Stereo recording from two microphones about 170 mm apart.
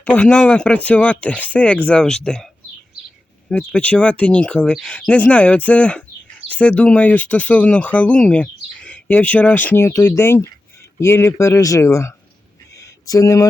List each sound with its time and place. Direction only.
0.0 s speech: 10° left (ahead or behind)
3.5 s speech: 5° left (ahead or behind)
12.7 s a sound: 20° left (ahead or behind)